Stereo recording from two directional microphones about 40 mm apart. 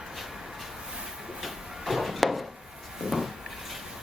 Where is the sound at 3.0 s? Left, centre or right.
Centre.